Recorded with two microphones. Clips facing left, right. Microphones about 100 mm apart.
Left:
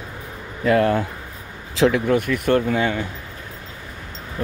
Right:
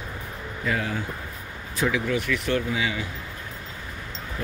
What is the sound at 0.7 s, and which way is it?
Speech, 65° left (ahead or behind).